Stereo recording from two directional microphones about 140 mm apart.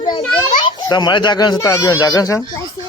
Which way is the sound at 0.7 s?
35° left (ahead or behind).